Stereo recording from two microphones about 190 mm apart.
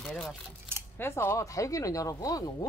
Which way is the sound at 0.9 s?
10° left (ahead or behind).